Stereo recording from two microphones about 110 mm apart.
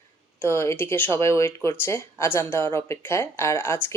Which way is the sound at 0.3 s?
20° left (ahead or behind).